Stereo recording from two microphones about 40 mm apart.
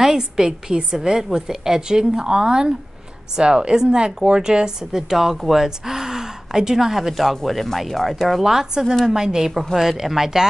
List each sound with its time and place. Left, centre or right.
0.0 s speech: centre
8.5 s speech: centre